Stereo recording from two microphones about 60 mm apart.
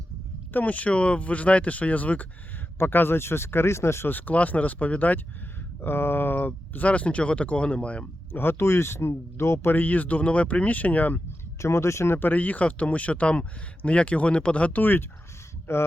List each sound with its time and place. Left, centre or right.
0.5 s speech: left
2.7 s speech: left
4.1 s speech: left
5.8 s speech: left
8.3 s speech: left
9.7 s speech: left
11.6 s speech: left
12.3 s speech: left
15.7 s speech: left